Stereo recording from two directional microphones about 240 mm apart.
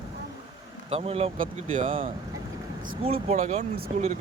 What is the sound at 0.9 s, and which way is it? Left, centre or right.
Speech, right.